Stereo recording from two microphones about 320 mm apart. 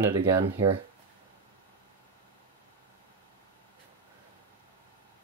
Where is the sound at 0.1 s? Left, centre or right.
Centre.